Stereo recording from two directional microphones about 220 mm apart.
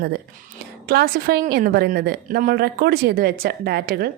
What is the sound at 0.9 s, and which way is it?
A woman's voice, 45° right (ahead or behind).